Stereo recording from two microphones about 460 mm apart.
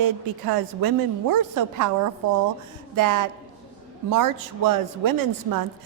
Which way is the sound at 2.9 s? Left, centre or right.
Right.